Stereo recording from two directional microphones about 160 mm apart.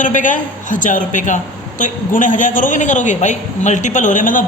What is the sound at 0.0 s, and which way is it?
A man's voice, 55° left (ahead or behind).